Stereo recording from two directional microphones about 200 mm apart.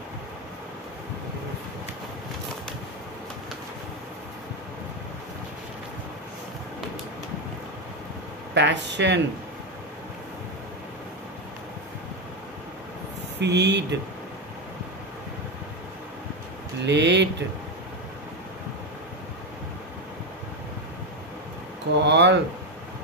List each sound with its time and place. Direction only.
8.5 s speech: 60° right (ahead or behind)
13.4 s speech: 55° right (ahead or behind)
16.8 s speech: 60° right (ahead or behind)
22.0 s speech: 60° right (ahead or behind)